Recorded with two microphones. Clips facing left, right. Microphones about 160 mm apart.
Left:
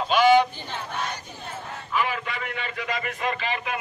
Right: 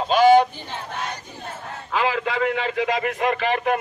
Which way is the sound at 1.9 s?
90° right.